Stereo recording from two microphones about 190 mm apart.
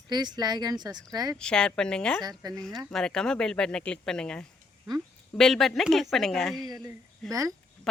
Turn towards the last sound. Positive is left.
turn(degrees=-20)  # may be behind; listen again after turning